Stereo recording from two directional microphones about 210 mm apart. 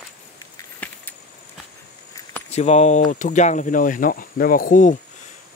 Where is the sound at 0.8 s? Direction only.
5° left (ahead or behind).